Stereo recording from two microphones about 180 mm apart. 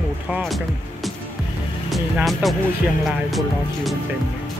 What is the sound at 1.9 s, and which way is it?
Speech, centre (ahead or behind).